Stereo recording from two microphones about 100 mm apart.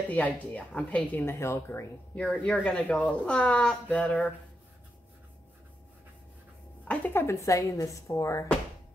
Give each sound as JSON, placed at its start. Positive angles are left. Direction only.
{"t": 0.1, "sound": "speech", "side_deg": 15}
{"t": 1.2, "sound": "speech", "side_deg": 25}
{"t": 2.1, "sound": "speech", "side_deg": 10}
{"t": 6.8, "sound": "speech", "side_deg": 15}